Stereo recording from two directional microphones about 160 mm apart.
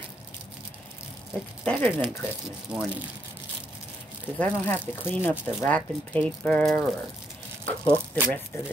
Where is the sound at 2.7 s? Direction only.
5° right (ahead or behind).